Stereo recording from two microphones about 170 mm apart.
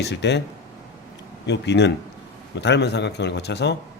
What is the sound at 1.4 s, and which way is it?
A man's voice, 90° left.